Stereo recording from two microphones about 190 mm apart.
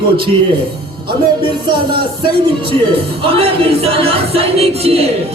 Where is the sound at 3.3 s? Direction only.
30° right (ahead or behind).